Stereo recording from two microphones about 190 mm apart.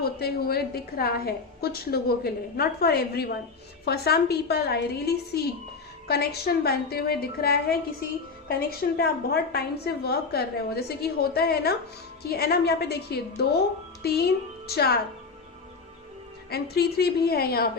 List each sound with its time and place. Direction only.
0.0 s a woman's voice: 55° left (ahead or behind)
16.5 s a woman's voice: 55° left (ahead or behind)